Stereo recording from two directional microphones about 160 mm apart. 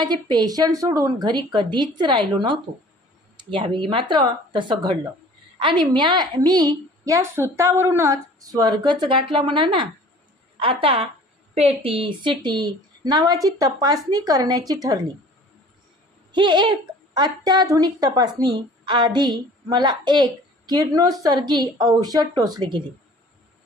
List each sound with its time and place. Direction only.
0.0 s a woman's voice: 25° right (ahead or behind)
16.3 s a woman's voice: 30° right (ahead or behind)